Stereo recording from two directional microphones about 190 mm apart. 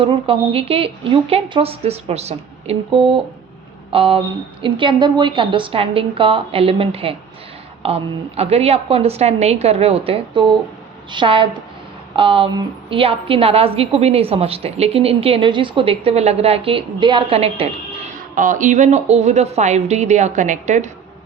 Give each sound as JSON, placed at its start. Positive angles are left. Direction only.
{"t": 0.0, "sound": "a woman's voice", "side_deg": -30}
{"t": 18.3, "sound": "a woman's voice", "side_deg": -40}